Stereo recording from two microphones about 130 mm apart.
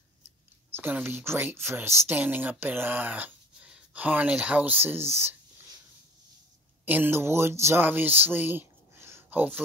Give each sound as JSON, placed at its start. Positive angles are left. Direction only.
{"t": 0.7, "sound": "speech", "side_deg": -15}
{"t": 6.9, "sound": "speech", "side_deg": -15}